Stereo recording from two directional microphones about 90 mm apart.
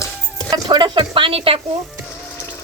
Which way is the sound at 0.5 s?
60° right (ahead or behind).